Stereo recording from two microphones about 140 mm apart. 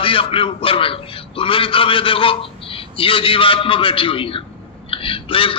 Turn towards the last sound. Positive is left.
turn(degrees=40)  # may be behind; listen again after turning